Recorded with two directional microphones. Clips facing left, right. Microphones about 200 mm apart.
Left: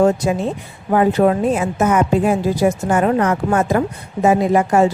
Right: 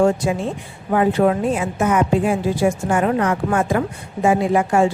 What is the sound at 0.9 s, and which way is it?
A woman's voice, 40° left (ahead or behind).